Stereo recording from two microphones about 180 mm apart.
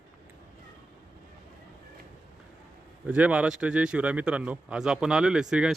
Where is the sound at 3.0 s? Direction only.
5° right (ahead or behind).